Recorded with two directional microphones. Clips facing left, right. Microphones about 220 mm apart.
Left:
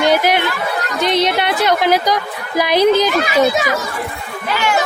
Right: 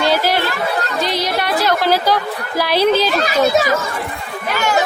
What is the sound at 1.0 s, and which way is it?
A woman's voice, 20° left (ahead or behind).